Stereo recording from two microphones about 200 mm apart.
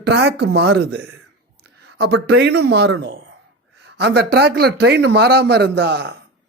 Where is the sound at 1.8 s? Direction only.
55° right (ahead or behind).